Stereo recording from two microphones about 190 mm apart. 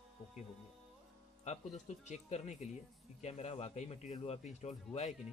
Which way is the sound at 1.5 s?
40° left (ahead or behind).